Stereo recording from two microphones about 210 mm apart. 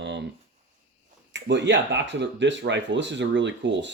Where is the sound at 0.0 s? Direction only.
55° right (ahead or behind).